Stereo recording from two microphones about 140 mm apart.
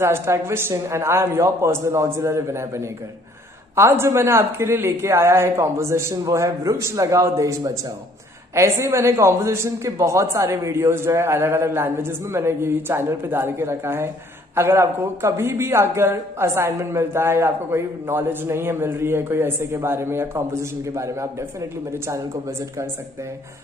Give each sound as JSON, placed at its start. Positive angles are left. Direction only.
{"t": 0.0, "sound": "speech", "side_deg": -20}